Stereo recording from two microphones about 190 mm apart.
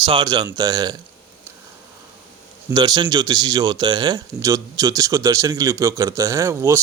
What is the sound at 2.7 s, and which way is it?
Speech, 20° right (ahead or behind).